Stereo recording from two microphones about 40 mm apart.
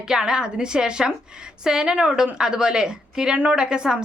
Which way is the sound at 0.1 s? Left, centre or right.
Centre.